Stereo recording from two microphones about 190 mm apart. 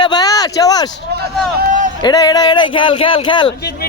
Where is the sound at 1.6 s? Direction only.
45° right (ahead or behind).